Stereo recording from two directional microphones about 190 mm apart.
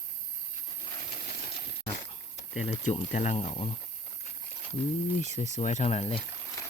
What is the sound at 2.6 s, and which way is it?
Speech, 35° left (ahead or behind).